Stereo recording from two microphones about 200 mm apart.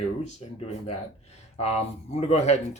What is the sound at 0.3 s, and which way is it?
Speech, 30° left (ahead or behind).